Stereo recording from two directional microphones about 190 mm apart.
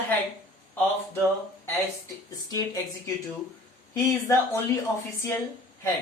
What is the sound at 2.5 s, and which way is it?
Speech, 20° left (ahead or behind).